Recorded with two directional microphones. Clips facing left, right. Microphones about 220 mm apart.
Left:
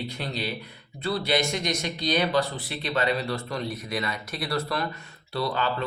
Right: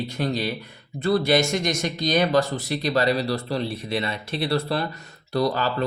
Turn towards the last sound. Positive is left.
turn(degrees=-40)  # may be behind; listen again after turning